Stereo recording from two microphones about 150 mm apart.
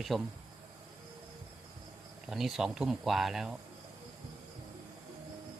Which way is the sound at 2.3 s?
Centre (ahead or behind).